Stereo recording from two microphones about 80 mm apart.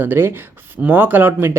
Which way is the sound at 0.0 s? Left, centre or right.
Right.